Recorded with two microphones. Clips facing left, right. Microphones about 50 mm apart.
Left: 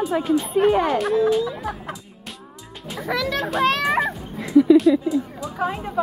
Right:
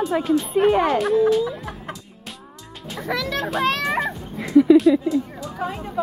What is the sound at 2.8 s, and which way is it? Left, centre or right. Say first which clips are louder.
Children playing: left 1 dB; centre.